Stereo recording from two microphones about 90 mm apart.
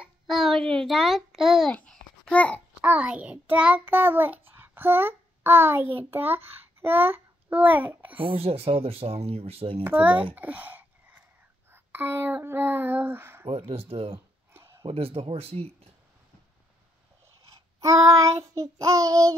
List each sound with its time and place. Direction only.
0.3 s a child's voice: centre (ahead or behind)
1.7 s babbling: 15° left (ahead or behind)
2.3 s a child's voice: 15° left (ahead or behind)
2.8 s child singing: 15° right (ahead or behind)
6.8 s a child's voice: 25° right (ahead or behind)
8.2 s speech: 85° right
9.8 s speech: 20° right (ahead or behind)
10.3 s a sound: 15° right (ahead or behind)
12.4 s speech: 25° right (ahead or behind)
13.5 s speech: 90° right
14.5 s a sound: 30° right (ahead or behind)
14.9 s speech: 90° right
17.7 s child singing: 40° right (ahead or behind)